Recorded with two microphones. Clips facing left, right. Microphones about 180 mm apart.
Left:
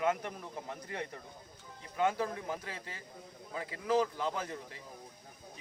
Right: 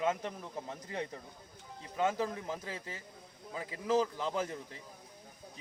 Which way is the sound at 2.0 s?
25° right (ahead or behind).